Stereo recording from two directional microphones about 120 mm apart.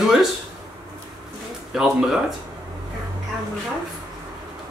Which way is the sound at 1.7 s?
5° right (ahead or behind).